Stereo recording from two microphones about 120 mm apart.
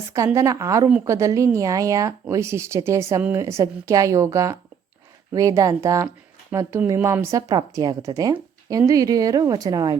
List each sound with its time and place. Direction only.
0.3 s a woman's voice: 25° right (ahead or behind)